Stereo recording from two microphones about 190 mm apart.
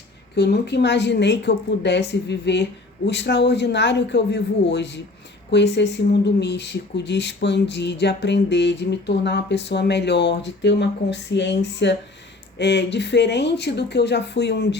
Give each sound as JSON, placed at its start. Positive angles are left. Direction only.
{"t": 0.3, "sound": "speech", "side_deg": 60}